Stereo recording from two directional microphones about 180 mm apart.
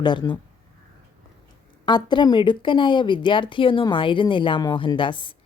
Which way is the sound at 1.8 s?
25° left (ahead or behind).